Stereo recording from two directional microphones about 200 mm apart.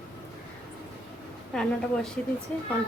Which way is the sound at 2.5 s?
5° left (ahead or behind).